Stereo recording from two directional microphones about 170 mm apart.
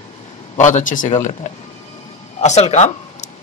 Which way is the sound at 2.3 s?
40° left (ahead or behind).